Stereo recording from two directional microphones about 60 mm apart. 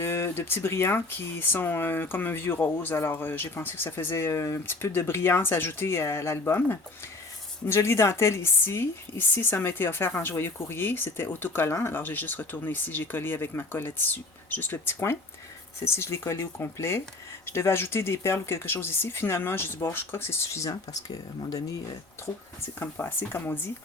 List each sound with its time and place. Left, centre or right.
0.0 s speech: left
4.3 s speech: left
15.8 s speech: left
22.8 s speech: left